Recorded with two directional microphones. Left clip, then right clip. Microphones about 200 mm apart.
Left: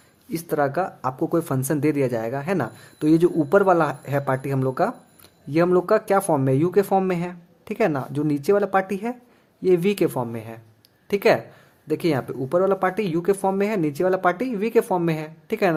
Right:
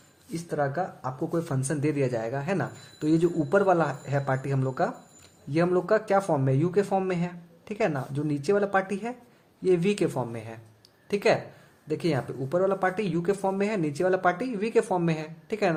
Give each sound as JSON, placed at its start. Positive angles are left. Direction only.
{"t": 0.3, "sound": "speech", "side_deg": 45}